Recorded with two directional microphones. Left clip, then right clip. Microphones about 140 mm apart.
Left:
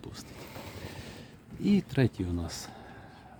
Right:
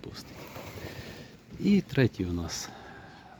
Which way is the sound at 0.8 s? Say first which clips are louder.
Right 2 dB; 20° left (ahead or behind).